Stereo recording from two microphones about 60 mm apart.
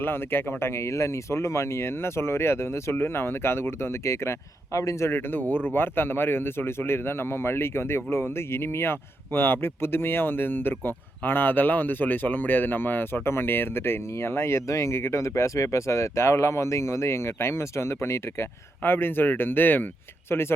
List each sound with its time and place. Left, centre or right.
0.0 s speech: left